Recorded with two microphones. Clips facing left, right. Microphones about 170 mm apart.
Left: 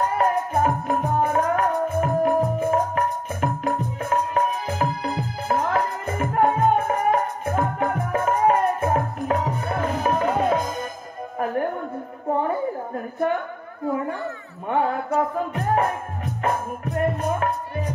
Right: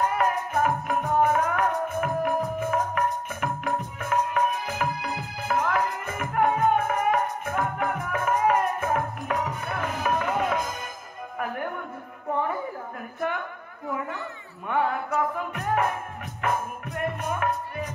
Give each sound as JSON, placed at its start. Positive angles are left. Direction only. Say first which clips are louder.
{"t": 0.1, "sound": "music", "louder": "left 4 dB", "side_deg": 35}
{"t": 12.3, "sound": "a sound", "louder": "left 5 dB", "side_deg": 35}
{"t": 14.7, "sound": "music", "louder": "left 3 dB", "side_deg": 35}